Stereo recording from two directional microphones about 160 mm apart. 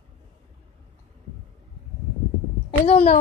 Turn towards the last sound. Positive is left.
turn(degrees=40)  # may be behind; listen again after turning